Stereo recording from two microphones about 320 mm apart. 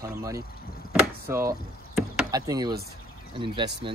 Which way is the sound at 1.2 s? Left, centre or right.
Centre.